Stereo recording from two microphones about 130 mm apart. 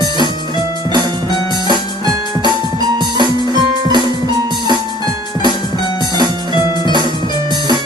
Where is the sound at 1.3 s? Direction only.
35° left (ahead or behind).